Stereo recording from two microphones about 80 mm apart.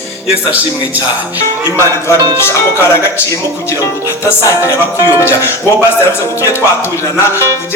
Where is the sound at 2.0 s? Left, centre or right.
Left.